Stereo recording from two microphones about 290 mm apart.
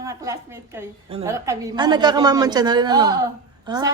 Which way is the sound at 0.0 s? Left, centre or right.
Centre.